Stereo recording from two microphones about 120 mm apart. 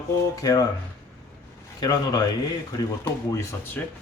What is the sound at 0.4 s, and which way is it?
Speech, 35° left (ahead or behind).